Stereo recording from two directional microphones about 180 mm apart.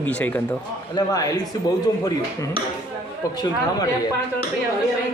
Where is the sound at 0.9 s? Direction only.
20° left (ahead or behind).